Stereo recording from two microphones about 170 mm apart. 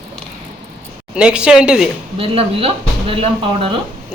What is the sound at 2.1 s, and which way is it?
Speech, 35° right (ahead or behind).